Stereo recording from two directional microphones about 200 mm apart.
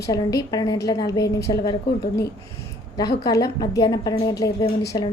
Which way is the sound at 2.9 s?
20° left (ahead or behind).